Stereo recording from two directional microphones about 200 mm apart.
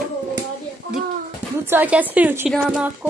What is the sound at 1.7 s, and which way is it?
A woman's voice, 10° right (ahead or behind).